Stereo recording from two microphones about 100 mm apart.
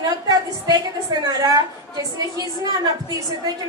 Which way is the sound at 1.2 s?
40° right (ahead or behind).